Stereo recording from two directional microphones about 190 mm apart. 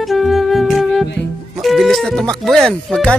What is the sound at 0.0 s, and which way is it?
Music, centre (ahead or behind).